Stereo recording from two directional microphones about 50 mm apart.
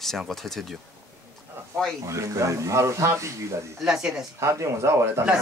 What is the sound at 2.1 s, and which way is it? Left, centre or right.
A man's voice, right.